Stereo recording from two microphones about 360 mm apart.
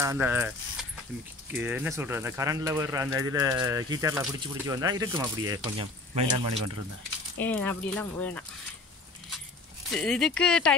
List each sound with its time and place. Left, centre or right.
0.0 s speech: centre
6.5 s speech: right
7.3 s speech: centre
9.8 s speech: centre